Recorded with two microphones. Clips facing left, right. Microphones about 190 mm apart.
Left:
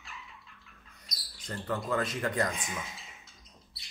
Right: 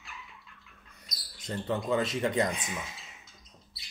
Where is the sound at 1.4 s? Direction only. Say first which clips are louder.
Right 3 dB; 25° right (ahead or behind).